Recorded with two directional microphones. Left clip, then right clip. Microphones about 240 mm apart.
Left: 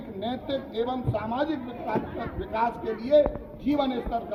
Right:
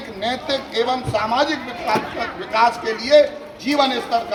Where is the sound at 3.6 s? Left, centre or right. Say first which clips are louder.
Right 9 dB; right.